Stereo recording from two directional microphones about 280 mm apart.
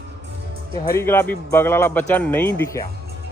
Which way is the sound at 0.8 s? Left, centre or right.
Centre.